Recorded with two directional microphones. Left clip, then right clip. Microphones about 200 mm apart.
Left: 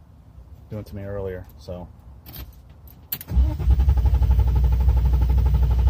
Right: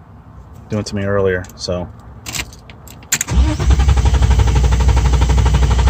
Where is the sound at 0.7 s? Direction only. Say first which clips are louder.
Right 15 dB; 25° right (ahead or behind).